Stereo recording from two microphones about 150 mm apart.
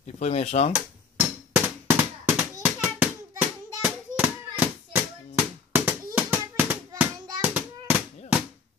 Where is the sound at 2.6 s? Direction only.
10° right (ahead or behind).